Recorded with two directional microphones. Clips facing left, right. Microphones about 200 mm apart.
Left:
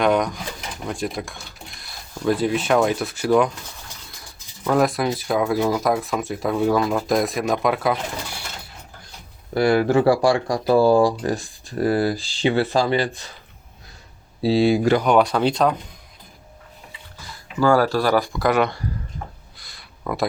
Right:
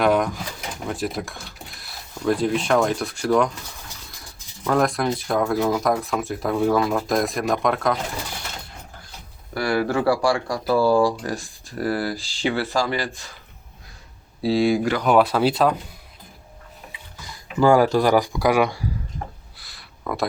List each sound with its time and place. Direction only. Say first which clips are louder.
0.0 s speech: even; 5° right (ahead or behind)
4.6 s speech: left 1 dB; 5° left (ahead or behind)
9.6 s speech: left 5 dB; 25° left (ahead or behind)
14.4 s speech: left 2 dB; 25° left (ahead or behind)
15.0 s speech: even; 5° right (ahead or behind)
17.6 s speech: right 2 dB; 15° right (ahead or behind)
19.5 s a sound: left 1 dB; centre (ahead or behind)